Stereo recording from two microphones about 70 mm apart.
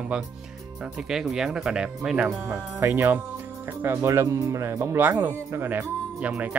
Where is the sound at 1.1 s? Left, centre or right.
Centre.